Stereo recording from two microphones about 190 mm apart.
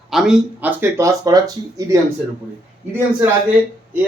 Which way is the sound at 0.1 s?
Centre (ahead or behind).